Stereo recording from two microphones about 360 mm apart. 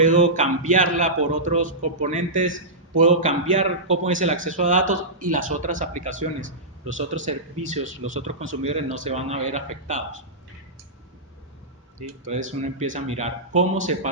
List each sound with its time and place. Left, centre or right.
0.0 s speech: right
11.9 s speech: right